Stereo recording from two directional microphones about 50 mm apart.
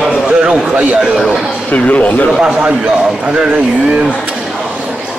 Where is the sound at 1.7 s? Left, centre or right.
Left.